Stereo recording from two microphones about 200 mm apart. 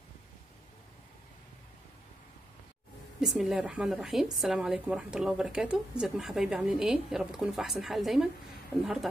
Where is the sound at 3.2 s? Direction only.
5° right (ahead or behind).